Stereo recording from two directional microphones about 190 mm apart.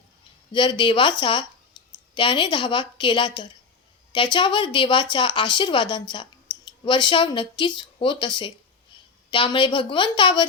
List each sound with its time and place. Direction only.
0.5 s speech: 25° left (ahead or behind)